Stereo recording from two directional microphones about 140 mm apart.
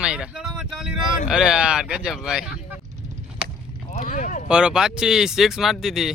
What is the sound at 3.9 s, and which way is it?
Speech, 60° left (ahead or behind).